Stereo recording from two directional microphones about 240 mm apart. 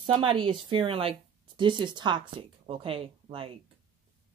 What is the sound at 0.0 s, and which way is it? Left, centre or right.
Speech, right.